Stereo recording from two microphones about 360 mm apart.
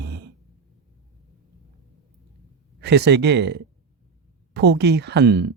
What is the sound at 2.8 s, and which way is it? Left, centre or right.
Speech, right.